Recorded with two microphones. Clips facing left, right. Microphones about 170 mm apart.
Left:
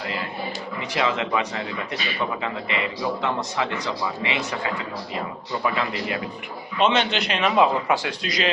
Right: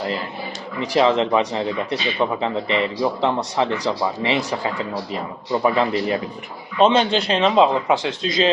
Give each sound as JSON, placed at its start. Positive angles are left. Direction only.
{"t": 0.8, "sound": "speech", "side_deg": -35}